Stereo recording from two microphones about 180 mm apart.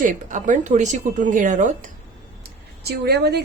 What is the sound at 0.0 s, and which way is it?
A woman's voice, 45° right (ahead or behind).